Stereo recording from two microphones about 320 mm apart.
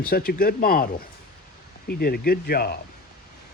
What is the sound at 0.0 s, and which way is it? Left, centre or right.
A man's voice, left.